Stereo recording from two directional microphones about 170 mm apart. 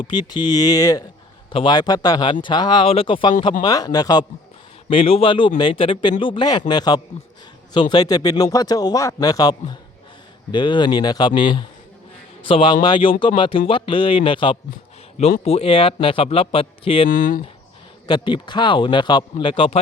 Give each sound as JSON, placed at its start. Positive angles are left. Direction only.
{"t": 0.0, "sound": "speech", "side_deg": 25}
{"t": 17.1, "sound": "speech", "side_deg": 55}
{"t": 18.1, "sound": "speech", "side_deg": 25}